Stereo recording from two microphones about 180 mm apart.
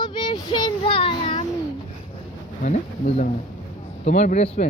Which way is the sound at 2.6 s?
45° left (ahead or behind).